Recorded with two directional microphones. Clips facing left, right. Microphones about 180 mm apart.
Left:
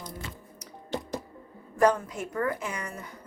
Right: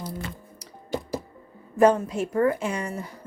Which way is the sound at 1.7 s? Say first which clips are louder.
Right 5 dB; 25° right (ahead or behind).